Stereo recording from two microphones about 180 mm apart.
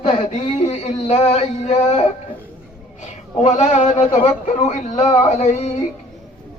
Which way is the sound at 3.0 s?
40° left (ahead or behind).